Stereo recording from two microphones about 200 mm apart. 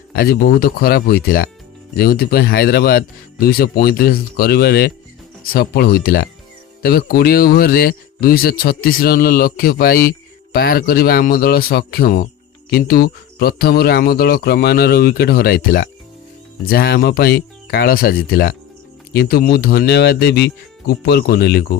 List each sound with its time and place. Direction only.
0.2 s speech: 50° left (ahead or behind)